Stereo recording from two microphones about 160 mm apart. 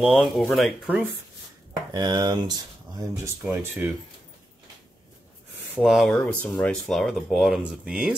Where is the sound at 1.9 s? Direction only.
25° right (ahead or behind).